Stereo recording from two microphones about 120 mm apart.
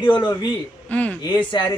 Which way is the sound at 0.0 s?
45° left (ahead or behind).